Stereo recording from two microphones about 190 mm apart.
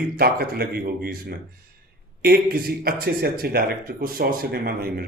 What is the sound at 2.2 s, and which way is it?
Speech, 50° right (ahead or behind).